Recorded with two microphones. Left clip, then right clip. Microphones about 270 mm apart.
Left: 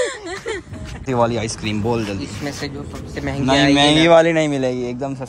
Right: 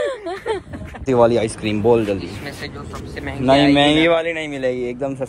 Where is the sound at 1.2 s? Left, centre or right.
Centre.